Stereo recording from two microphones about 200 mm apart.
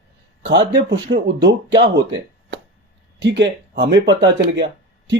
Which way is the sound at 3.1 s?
60° right (ahead or behind).